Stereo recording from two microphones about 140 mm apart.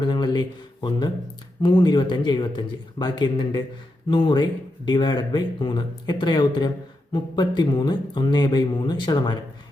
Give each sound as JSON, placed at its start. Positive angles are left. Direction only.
{"t": 0.0, "sound": "speech", "side_deg": 35}